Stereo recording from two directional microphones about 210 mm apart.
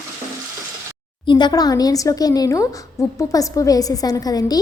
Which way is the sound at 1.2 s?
20° left (ahead or behind).